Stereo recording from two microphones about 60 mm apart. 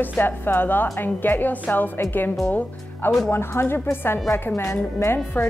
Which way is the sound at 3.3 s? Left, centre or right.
Left.